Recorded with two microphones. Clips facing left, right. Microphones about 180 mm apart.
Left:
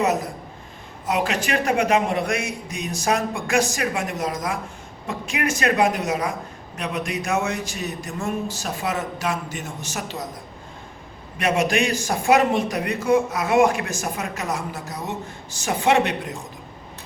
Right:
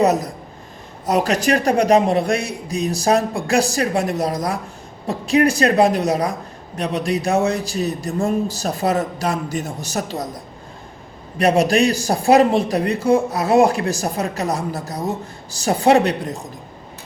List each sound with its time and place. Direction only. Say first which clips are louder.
0.0 s a sound: right 5 dB; 35° right (ahead or behind)
1.0 s speech: right 6 dB; 40° right (ahead or behind)
11.3 s speech: right 6 dB; 35° right (ahead or behind)